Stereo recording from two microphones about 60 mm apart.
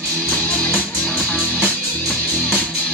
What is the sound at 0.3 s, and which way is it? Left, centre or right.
Music, left.